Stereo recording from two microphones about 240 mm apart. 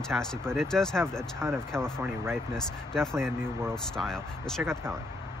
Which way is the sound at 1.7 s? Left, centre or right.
Centre.